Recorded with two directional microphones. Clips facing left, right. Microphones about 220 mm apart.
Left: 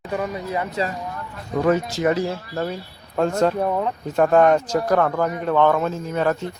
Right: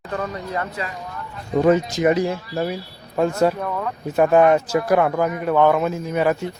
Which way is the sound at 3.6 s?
25° left (ahead or behind).